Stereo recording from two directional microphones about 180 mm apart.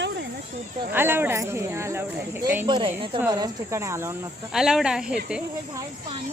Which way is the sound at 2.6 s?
25° right (ahead or behind).